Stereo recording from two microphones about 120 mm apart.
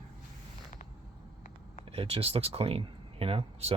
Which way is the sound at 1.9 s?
55° right (ahead or behind).